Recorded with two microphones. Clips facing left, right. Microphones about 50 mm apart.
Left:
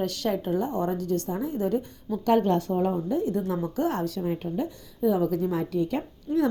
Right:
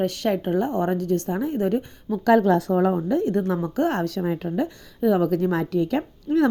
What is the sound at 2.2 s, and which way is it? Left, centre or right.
Speech, right.